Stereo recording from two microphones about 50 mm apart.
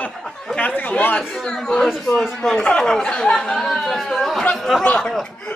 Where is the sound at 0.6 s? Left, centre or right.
Left.